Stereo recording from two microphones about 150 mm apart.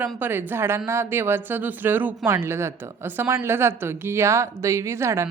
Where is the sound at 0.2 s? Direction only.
15° right (ahead or behind).